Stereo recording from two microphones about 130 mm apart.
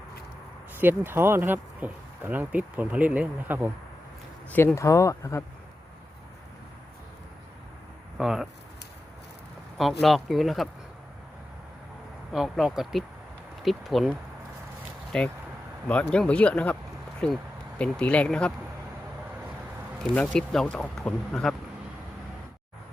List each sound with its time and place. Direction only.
0.8 s speech: 15° right (ahead or behind)
4.5 s speech: 20° left (ahead or behind)
8.2 s speech: 5° right (ahead or behind)
9.7 s speech: centre (ahead or behind)
12.3 s speech: 5° right (ahead or behind)
15.1 s speech: 5° left (ahead or behind)
20.1 s speech: 5° left (ahead or behind)